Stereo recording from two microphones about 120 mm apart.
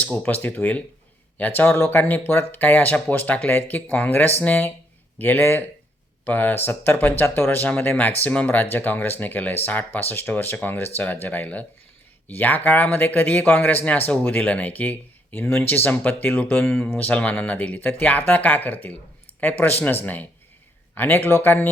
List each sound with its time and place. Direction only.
0.0 s speech: 5° left (ahead or behind)